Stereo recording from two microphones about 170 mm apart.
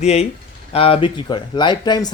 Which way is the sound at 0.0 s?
40° left (ahead or behind).